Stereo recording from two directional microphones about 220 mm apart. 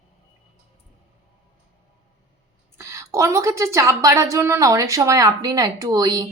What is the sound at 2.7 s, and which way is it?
A woman's voice, 15° right (ahead or behind).